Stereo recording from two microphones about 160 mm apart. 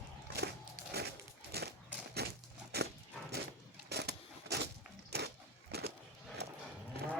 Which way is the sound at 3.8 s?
90° right.